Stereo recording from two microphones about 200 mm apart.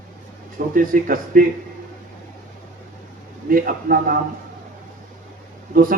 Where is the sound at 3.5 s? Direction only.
45° right (ahead or behind).